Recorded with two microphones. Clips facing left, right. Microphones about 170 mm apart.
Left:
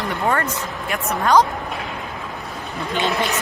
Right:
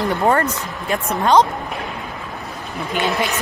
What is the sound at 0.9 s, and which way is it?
Speech, 25° right (ahead or behind).